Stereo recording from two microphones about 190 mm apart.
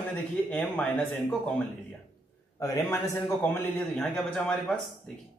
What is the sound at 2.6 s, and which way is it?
Speech, 15° left (ahead or behind).